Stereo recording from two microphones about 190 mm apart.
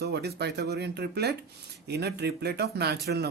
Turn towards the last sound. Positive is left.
turn(degrees=-60)  # may be behind; listen again after turning